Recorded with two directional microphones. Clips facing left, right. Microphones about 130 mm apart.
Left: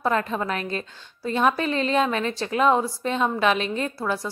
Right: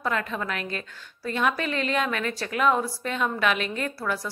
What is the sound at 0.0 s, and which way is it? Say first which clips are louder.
A woman's voice: left 4 dB; 30° left (ahead or behind).